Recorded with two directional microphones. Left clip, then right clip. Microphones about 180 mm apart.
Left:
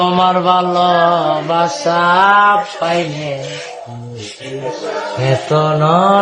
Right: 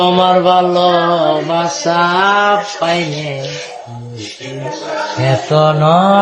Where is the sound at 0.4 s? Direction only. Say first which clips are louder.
Right 2 dB; 15° left (ahead or behind).